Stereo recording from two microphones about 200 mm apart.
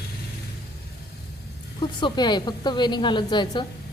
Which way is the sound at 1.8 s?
25° left (ahead or behind).